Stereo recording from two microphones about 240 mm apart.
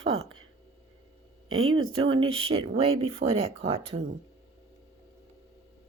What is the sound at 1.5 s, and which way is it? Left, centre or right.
Speech, right.